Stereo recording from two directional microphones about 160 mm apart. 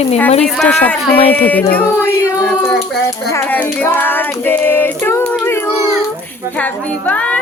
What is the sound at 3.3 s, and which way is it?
Child singing, 15° left (ahead or behind).